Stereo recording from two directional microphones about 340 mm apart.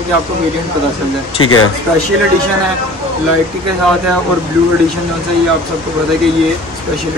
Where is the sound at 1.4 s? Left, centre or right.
Left.